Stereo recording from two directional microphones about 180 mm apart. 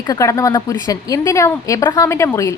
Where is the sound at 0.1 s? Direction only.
15° left (ahead or behind).